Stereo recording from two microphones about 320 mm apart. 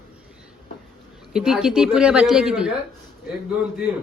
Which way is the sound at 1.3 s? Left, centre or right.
Centre.